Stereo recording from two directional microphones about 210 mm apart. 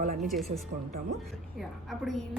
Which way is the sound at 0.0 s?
40° right (ahead or behind).